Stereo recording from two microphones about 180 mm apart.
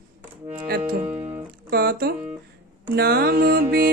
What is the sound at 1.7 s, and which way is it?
Music, 60° right (ahead or behind).